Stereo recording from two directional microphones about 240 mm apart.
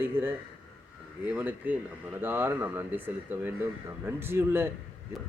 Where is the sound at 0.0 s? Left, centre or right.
Centre.